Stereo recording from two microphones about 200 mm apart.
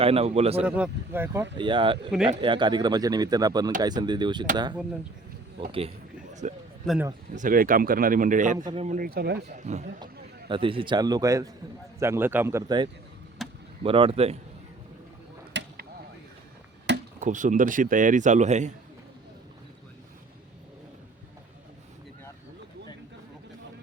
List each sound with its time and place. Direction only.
0.0 s speech: 30° right (ahead or behind)
0.6 s speech: 5° right (ahead or behind)
1.5 s speech: 25° right (ahead or behind)
6.4 s speech: 35° right (ahead or behind)
6.8 s a man's voice: 5° left (ahead or behind)
7.3 s speech: 45° right (ahead or behind)
8.5 s speech: 20° right (ahead or behind)
8.8 s speech: 40° right (ahead or behind)
9.5 s speech: 35° right (ahead or behind)
13.4 s a sound: centre (ahead or behind)
13.8 s speech: 25° right (ahead or behind)
15.6 s a sound: 60° right (ahead or behind)
17.2 s speech: 40° right (ahead or behind)